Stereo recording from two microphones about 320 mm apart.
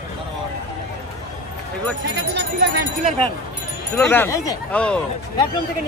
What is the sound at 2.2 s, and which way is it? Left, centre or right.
Speech, right.